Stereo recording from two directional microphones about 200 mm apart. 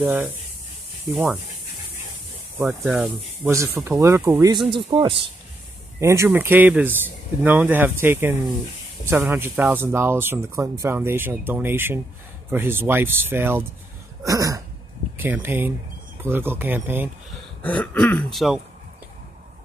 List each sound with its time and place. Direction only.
0.0 s speech: 10° right (ahead or behind)
2.6 s speech: 10° right (ahead or behind)
4.7 s a man's voice: 25° right (ahead or behind)
5.9 s speech: 15° right (ahead or behind)
17.6 s speech: 5° left (ahead or behind)